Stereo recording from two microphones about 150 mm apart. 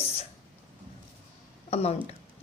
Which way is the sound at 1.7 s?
45° left (ahead or behind).